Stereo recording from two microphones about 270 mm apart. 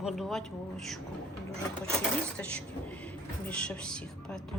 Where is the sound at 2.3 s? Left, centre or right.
Centre.